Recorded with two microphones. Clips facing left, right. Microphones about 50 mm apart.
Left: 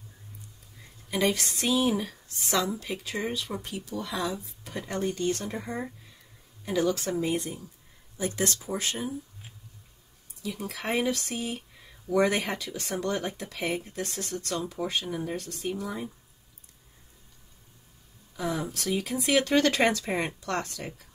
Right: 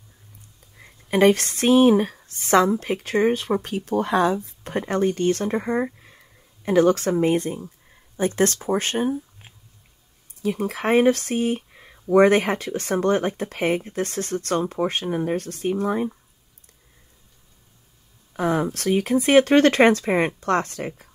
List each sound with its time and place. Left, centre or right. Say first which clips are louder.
0.7 s speech: right 10 dB; right
18.3 s speech: right 9 dB; right